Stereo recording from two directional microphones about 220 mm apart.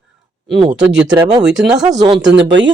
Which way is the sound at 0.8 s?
5° right (ahead or behind).